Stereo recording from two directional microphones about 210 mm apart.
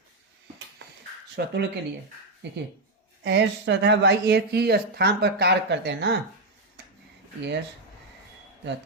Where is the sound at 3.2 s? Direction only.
55° right (ahead or behind).